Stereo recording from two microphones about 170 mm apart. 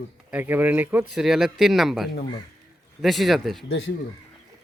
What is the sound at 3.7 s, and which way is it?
Speech, 90° left.